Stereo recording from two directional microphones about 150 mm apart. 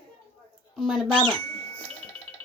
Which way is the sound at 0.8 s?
Centre (ahead or behind).